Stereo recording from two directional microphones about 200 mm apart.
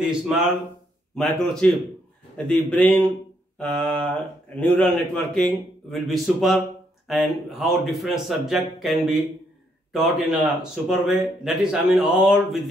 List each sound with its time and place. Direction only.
0.0 s a man's voice: centre (ahead or behind)